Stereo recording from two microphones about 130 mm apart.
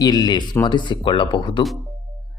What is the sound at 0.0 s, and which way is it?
Speech, 30° left (ahead or behind).